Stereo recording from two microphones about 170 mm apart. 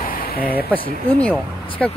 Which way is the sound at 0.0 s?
60° left (ahead or behind).